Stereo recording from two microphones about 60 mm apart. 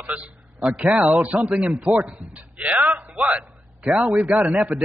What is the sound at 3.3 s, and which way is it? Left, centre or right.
A man's voice, right.